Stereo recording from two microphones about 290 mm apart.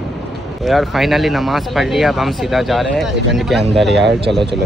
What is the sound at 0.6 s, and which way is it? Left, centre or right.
Speech, centre.